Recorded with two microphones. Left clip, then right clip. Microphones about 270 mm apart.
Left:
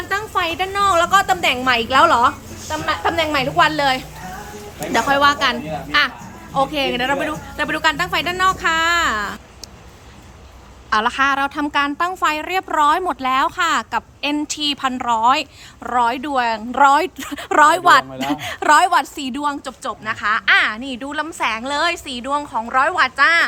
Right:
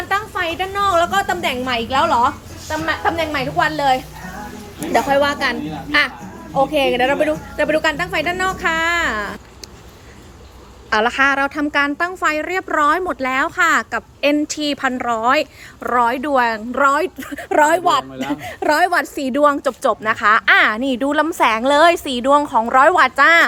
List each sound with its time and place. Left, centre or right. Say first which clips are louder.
0.1 s a woman's voice: even; centre
10.8 s a woman's voice: right 1 dB; centre; by 23.5 s right